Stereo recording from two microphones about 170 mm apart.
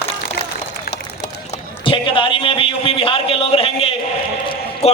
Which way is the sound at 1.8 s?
30° left (ahead or behind).